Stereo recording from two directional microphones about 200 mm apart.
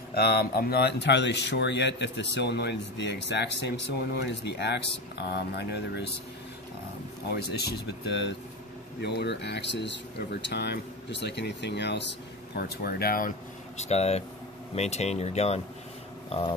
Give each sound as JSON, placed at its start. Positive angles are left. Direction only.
{"t": 0.1, "sound": "speech", "side_deg": 50}
{"t": 7.3, "sound": "speech", "side_deg": 55}
{"t": 13.7, "sound": "speech", "side_deg": 35}